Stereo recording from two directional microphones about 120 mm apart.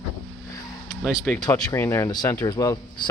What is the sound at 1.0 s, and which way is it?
Speech, 5° left (ahead or behind).